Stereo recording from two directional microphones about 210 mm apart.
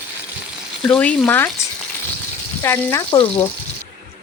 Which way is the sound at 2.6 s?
10° left (ahead or behind).